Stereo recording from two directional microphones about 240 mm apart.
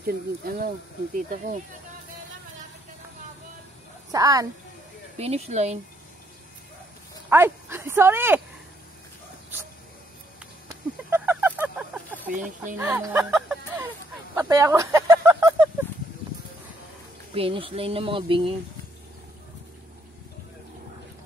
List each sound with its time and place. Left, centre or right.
0.0 s speech: right
4.1 s a woman's voice: centre
5.2 s speech: right
7.2 s speech: centre
11.1 s honk: centre
12.3 s speech: right
12.7 s speech: centre
14.3 s a sound: centre
17.3 s speech: right